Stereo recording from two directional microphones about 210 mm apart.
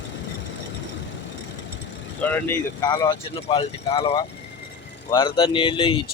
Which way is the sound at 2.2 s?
5° left (ahead or behind).